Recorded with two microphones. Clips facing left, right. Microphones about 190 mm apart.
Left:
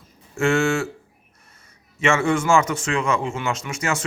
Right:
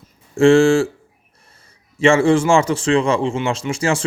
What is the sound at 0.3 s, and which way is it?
Speech, 30° right (ahead or behind).